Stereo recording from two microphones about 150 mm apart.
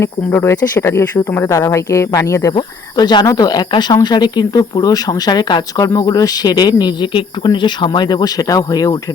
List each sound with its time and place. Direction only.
0.0 s speech: 15° left (ahead or behind)